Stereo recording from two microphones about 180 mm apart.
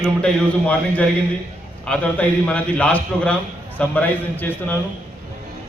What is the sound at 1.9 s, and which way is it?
A man's voice, 5° left (ahead or behind).